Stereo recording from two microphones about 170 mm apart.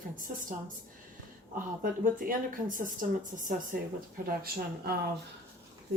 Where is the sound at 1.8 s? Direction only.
55° right (ahead or behind).